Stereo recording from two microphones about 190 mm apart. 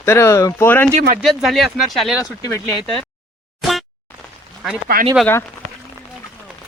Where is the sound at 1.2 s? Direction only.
Centre (ahead or behind).